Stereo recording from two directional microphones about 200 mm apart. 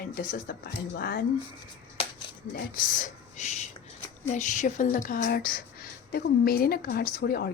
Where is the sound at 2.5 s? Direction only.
45° left (ahead or behind).